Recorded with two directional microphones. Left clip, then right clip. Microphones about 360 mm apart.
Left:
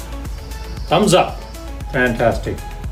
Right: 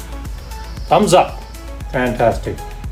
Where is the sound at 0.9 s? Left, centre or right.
Centre.